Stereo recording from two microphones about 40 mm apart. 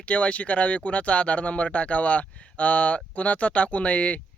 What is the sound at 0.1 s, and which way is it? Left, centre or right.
Speech, left.